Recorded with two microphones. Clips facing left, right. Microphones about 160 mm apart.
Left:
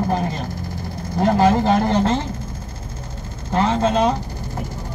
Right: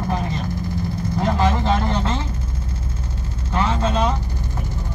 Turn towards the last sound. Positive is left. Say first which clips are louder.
# left 3 dB
turn(degrees=40)  # may be behind; listen again after turning